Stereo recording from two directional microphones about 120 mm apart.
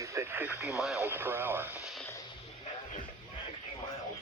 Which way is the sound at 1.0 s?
20° right (ahead or behind).